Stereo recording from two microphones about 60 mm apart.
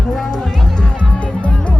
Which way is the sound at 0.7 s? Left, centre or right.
Centre.